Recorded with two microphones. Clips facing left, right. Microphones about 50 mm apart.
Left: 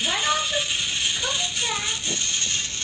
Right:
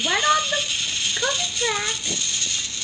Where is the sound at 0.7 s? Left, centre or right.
Centre.